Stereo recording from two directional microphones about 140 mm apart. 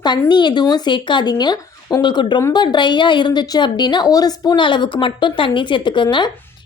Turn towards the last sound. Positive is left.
turn(degrees=35)  # may be behind; listen again after turning